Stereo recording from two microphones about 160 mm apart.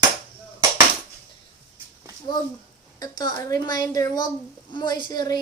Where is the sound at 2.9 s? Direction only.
25° left (ahead or behind).